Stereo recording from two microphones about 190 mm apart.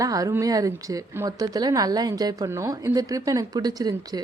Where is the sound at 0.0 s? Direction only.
20° right (ahead or behind).